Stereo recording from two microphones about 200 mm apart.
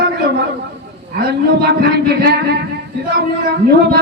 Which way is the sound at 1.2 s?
50° right (ahead or behind).